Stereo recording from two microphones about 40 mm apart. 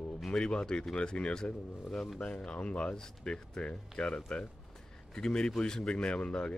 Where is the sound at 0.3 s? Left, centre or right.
Left.